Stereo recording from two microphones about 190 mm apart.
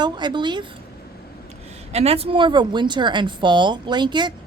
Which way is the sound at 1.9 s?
30° right (ahead or behind).